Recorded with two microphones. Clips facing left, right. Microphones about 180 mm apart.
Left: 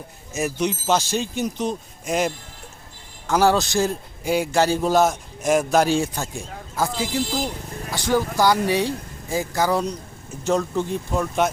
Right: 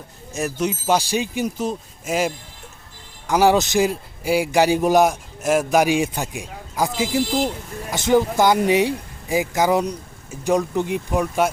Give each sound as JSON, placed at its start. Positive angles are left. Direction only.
{"t": 0.3, "sound": "a man's voice", "side_deg": 0}